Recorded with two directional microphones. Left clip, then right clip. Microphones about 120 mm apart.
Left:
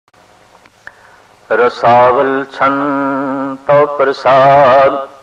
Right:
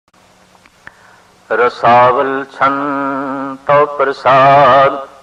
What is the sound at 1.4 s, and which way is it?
Mantra, 20° left (ahead or behind).